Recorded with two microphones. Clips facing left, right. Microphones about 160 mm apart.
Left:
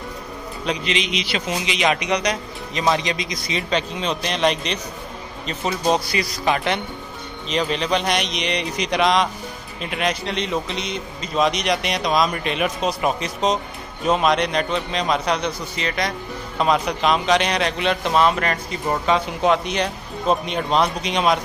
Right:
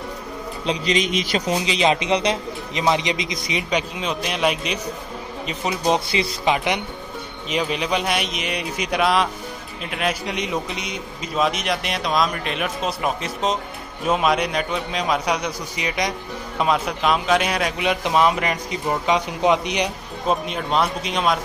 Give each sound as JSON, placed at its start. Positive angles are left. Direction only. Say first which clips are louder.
{"t": 0.7, "sound": "a man's voice", "louder": "right 2 dB", "side_deg": -40}
{"t": 1.5, "sound": "a man's voice", "louder": "right 2 dB", "side_deg": -30}
{"t": 10.2, "sound": "a man's voice", "louder": "left 1 dB", "side_deg": -10}
{"t": 16.5, "sound": "a man's voice", "louder": "left 1 dB", "side_deg": -5}
{"t": 20.4, "sound": "a man's voice", "louder": "left 2 dB", "side_deg": -5}